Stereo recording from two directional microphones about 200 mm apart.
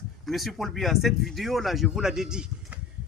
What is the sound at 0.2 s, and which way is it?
Speech, centre (ahead or behind).